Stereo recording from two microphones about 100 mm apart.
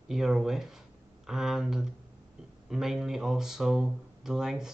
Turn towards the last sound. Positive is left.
turn(degrees=-5)  # may be behind; listen again after turning